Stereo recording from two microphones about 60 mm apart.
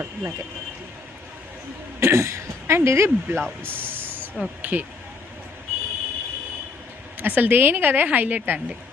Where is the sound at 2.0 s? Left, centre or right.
Right.